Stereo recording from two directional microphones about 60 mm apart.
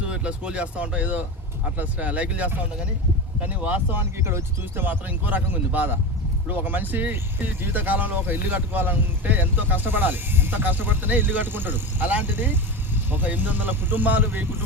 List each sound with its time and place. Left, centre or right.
0.0 s speech: centre
3.5 s speech: right
4.2 s speech: right
4.9 s speech: right